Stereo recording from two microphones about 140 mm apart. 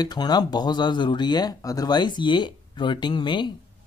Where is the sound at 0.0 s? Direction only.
30° left (ahead or behind).